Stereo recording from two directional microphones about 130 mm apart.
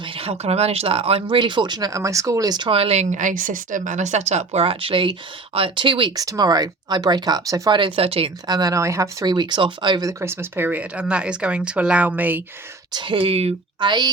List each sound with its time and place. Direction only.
0.0 s speech: 45° right (ahead or behind); by 7.8 s 30° right (ahead or behind)
7.8 s speech: 45° right (ahead or behind)
8.4 s speech: 30° right (ahead or behind)
10.1 s speech: 20° right (ahead or behind)
12.9 s speech: 40° right (ahead or behind)
13.8 s speech: 35° right (ahead or behind)